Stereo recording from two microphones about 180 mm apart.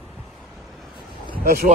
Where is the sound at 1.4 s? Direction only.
55° right (ahead or behind).